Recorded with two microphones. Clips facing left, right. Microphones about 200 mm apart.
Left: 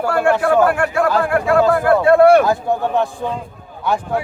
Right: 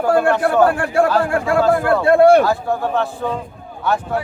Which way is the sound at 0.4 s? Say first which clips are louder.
Even; 35° right (ahead or behind).